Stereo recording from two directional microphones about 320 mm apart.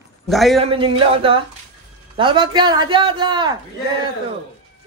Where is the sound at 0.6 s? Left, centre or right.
Centre.